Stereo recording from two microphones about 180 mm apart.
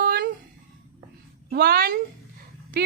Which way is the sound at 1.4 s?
60° right (ahead or behind).